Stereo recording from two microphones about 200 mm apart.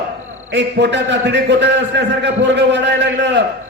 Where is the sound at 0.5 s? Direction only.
60° right (ahead or behind).